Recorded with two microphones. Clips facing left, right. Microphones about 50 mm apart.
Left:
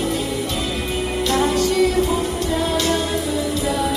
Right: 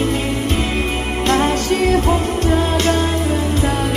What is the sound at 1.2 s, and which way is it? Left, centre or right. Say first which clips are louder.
Music: right 2 dB; right.